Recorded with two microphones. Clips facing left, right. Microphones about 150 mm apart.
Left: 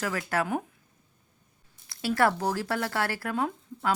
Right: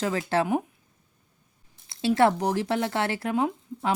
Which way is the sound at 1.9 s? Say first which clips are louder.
Right 4 dB; 25° right (ahead or behind).